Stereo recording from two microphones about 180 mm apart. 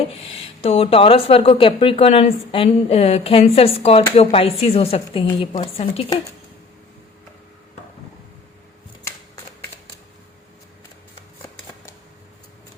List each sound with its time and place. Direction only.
0.0 s a woman's voice: 35° left (ahead or behind)